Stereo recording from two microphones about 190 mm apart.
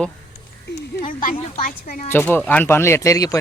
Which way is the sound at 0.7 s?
45° left (ahead or behind).